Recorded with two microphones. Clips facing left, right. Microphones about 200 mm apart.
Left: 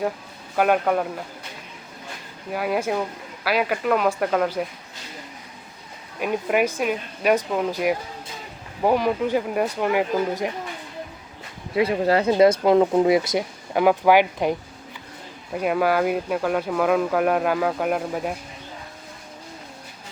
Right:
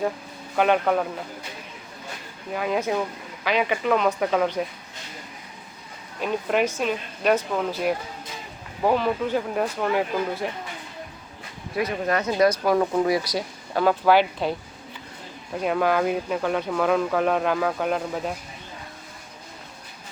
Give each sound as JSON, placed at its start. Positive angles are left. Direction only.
{"t": 0.5, "sound": "speech", "side_deg": 5}
{"t": 2.5, "sound": "speech", "side_deg": 5}
{"t": 6.1, "sound": "speech", "side_deg": 10}
{"t": 11.7, "sound": "speech", "side_deg": 30}
{"t": 15.5, "sound": "speech", "side_deg": 5}